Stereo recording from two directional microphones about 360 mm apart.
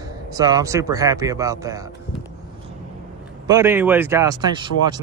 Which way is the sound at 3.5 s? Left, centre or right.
Centre.